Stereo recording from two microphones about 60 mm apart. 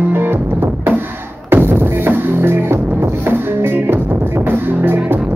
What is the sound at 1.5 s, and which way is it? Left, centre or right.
Music, right.